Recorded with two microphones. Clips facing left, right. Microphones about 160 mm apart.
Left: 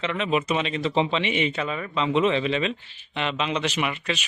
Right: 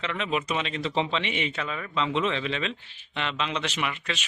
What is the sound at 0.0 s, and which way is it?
A man's voice, 5° left (ahead or behind).